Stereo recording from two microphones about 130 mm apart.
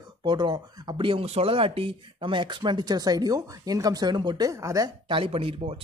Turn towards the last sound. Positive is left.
turn(degrees=-45)  # may be behind; listen again after turning